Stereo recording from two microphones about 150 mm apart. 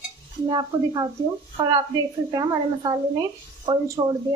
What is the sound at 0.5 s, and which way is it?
Speech, 30° right (ahead or behind).